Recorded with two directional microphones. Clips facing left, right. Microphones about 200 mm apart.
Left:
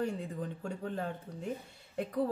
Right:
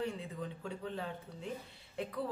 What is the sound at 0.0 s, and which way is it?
Speech, 45° left (ahead or behind).